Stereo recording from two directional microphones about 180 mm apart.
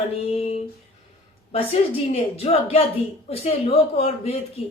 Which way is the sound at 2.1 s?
35° left (ahead or behind).